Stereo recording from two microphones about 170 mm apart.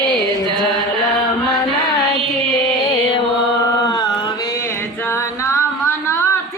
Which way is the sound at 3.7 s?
20° left (ahead or behind).